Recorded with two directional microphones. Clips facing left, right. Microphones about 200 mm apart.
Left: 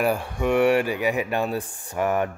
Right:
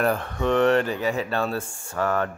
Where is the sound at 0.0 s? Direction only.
10° left (ahead or behind).